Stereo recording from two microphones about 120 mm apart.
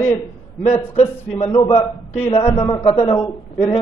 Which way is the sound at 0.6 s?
60° left (ahead or behind).